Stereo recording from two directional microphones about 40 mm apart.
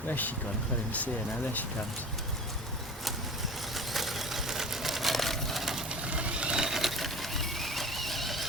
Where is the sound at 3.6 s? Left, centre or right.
Centre.